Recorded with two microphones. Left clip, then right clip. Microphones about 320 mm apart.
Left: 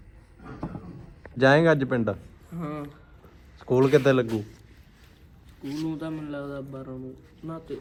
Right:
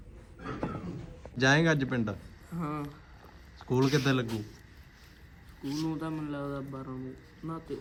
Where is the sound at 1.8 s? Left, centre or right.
Centre.